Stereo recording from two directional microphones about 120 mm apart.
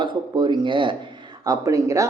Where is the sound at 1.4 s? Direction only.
30° right (ahead or behind).